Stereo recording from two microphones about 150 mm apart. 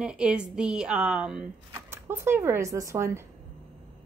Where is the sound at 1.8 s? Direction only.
15° right (ahead or behind).